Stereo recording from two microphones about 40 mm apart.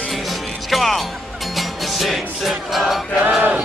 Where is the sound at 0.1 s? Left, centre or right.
Centre.